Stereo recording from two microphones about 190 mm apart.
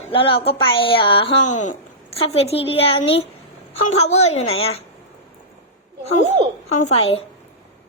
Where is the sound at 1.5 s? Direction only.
40° left (ahead or behind).